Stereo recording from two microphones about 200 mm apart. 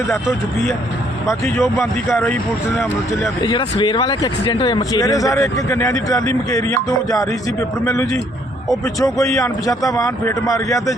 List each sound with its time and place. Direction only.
1.8 s speech: 10° left (ahead or behind)
3.2 s speech: 20° left (ahead or behind)